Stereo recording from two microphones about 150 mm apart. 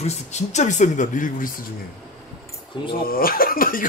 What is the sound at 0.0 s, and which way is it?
Speech, 50° left (ahead or behind).